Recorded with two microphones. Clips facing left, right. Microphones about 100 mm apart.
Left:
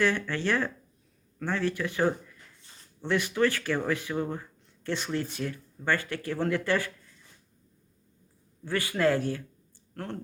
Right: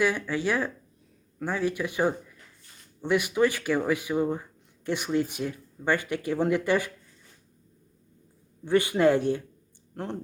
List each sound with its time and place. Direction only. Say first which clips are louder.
0.0 s speech: right 1 dB; 10° right (ahead or behind)
8.6 s speech: right 5 dB; 20° right (ahead or behind)